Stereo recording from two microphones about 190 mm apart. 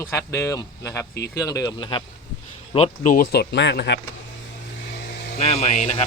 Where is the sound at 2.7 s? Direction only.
35° left (ahead or behind); by 4.0 s 65° left (ahead or behind).